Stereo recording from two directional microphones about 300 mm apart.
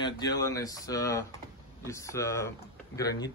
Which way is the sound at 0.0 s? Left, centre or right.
Centre.